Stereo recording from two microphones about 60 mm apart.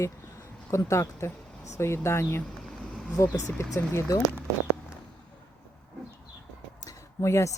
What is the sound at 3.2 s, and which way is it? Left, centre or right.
Speech, left.